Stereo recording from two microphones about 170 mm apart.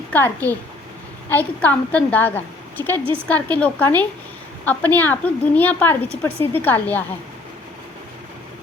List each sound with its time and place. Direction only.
0.1 s a woman's voice: 10° left (ahead or behind)